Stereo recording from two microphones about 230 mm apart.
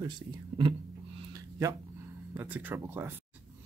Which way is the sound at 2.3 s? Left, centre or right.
Centre.